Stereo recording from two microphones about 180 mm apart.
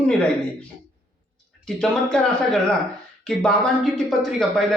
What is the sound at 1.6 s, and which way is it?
Speech, 5° left (ahead or behind).